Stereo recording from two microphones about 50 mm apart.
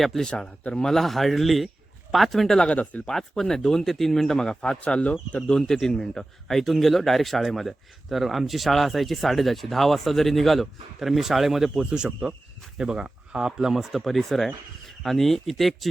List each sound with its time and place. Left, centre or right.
0.0 s speech: centre
0.3 s speech: centre
2.6 s speech: left
3.1 s speech: centre
4.8 s speech: left
5.5 s speech: centre
11.7 s speech: centre
13.7 s speech: centre